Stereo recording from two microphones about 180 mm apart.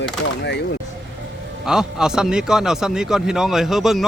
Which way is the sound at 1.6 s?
5° right (ahead or behind).